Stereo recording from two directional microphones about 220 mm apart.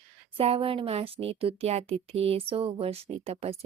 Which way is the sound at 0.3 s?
25° right (ahead or behind).